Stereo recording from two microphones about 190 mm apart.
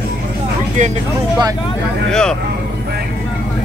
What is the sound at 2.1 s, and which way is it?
Speech, 5° left (ahead or behind).